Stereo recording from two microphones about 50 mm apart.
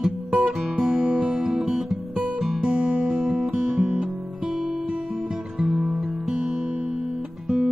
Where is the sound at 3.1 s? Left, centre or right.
Centre.